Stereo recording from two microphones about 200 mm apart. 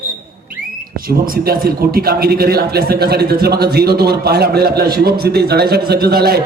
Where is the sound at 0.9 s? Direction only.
45° right (ahead or behind).